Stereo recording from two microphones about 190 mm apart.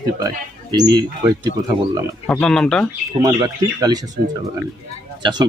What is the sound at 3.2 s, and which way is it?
Speech, 20° right (ahead or behind).